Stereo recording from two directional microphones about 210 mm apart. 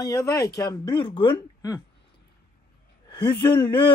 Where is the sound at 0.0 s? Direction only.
15° left (ahead or behind).